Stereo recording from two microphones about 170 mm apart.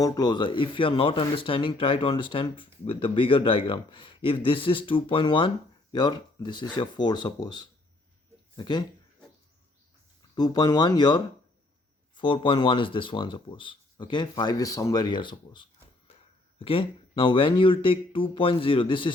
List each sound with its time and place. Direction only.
0.0 s speech: 20° left (ahead or behind)
10.3 s speech: 25° left (ahead or behind)